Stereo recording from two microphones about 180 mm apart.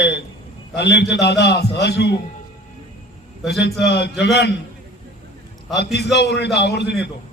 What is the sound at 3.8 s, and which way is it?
Speech, 70° left (ahead or behind).